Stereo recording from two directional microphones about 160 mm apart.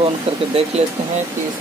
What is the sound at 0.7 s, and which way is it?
Speech, 40° right (ahead or behind).